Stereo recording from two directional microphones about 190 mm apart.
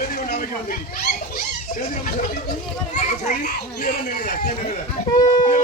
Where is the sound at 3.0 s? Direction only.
45° left (ahead or behind).